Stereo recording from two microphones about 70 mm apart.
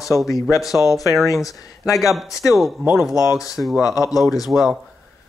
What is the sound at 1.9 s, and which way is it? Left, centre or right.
Speech, centre.